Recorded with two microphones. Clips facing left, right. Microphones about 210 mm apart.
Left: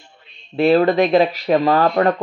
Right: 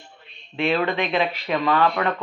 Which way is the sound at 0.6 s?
40° left (ahead or behind).